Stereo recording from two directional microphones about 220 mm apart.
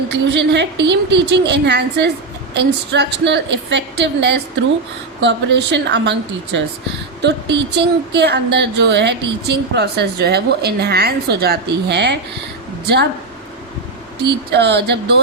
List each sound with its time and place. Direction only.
0.1 s a woman's voice: 50° right (ahead or behind)
14.5 s a woman's voice: 50° right (ahead or behind)